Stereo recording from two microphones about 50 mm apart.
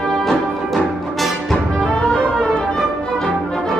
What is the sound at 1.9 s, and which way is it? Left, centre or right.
Music, left.